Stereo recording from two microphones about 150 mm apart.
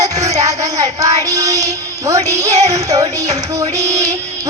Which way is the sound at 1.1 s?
25° right (ahead or behind).